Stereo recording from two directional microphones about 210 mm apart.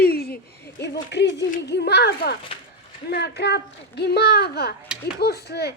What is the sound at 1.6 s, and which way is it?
A child's voice, 50° left (ahead or behind).